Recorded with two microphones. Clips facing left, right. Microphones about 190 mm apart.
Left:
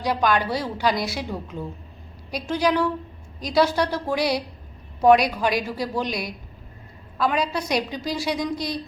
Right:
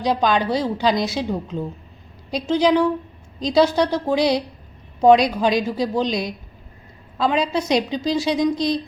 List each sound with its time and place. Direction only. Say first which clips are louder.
0.0 s a woman's voice: right 3 dB; 20° right (ahead or behind)